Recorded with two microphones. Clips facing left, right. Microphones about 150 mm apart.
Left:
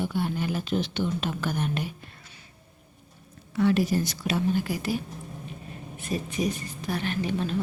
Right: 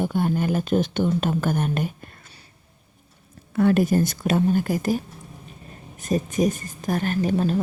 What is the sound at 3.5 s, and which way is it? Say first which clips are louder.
Speech: right 4 dB; 50° right (ahead or behind).